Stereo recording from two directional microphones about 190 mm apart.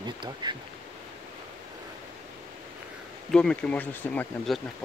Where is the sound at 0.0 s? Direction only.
20° right (ahead or behind).